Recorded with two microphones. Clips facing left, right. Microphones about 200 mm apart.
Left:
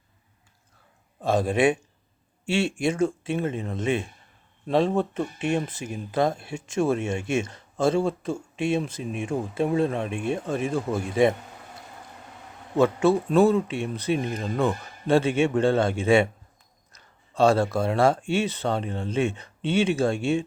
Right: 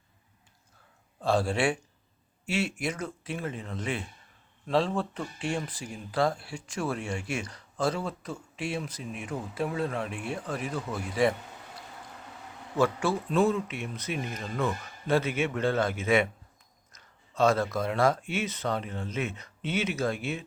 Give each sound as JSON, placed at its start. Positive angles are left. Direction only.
{"t": 1.2, "sound": "speech", "side_deg": 20}
{"t": 12.7, "sound": "speech", "side_deg": 25}